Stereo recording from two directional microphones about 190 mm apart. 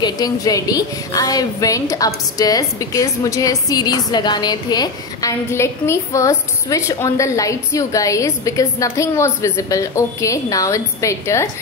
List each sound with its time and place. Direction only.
0.0 s a woman's voice: 20° left (ahead or behind)